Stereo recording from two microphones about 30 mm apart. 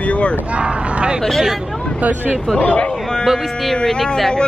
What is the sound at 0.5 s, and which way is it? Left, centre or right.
Speech, right.